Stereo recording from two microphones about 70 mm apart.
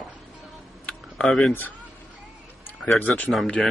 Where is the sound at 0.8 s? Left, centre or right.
Centre.